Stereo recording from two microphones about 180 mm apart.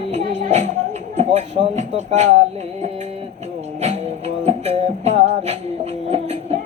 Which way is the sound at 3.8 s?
35° right (ahead or behind).